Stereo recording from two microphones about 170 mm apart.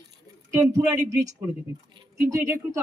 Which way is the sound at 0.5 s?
20° right (ahead or behind).